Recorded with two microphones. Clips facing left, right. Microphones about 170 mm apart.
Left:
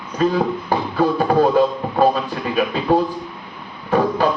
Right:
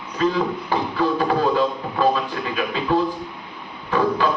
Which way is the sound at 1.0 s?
40° left (ahead or behind).